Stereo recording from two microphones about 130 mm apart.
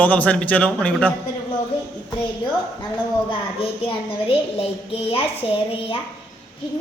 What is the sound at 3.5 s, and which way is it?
A woman's voice, 45° left (ahead or behind).